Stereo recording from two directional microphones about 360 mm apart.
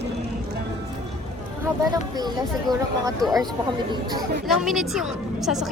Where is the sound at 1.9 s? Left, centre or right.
Centre.